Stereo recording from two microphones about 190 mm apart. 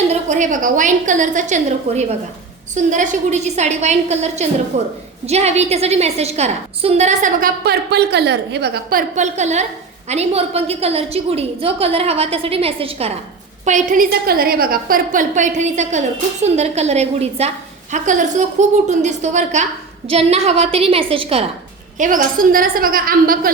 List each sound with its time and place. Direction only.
0.1 s a woman's voice: 40° right (ahead or behind)
13.7 s a woman's voice: 45° right (ahead or behind)
21.9 s a woman's voice: 45° right (ahead or behind)